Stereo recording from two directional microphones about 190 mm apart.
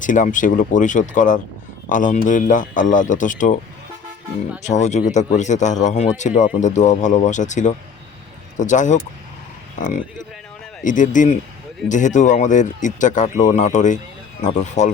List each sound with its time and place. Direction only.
0.0 s a man's voice: 40° left (ahead or behind)
4.6 s a man's voice: 40° left (ahead or behind)